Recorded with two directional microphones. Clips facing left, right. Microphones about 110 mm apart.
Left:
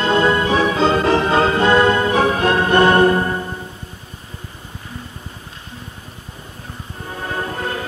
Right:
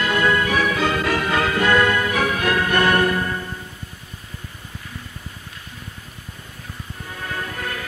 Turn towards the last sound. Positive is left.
turn(degrees=30)  # may be behind; listen again after turning